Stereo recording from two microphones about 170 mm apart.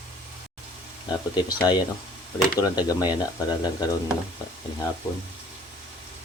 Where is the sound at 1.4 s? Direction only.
25° left (ahead or behind).